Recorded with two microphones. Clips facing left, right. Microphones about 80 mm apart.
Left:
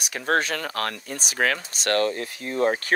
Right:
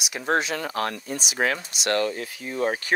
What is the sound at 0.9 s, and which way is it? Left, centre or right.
Speech, right.